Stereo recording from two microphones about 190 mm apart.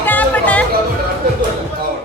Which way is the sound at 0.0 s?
10° left (ahead or behind).